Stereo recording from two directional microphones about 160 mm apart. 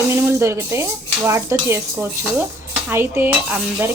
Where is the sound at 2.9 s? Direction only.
15° right (ahead or behind).